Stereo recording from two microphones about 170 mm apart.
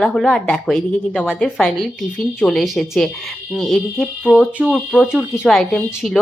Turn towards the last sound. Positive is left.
turn(degrees=0)  # may be behind; listen again after turning